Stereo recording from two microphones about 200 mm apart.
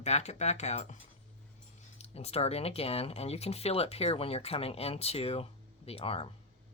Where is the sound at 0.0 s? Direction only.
35° left (ahead or behind).